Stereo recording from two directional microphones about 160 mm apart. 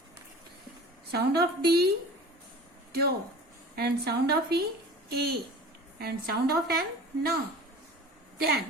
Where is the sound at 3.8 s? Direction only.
80° right.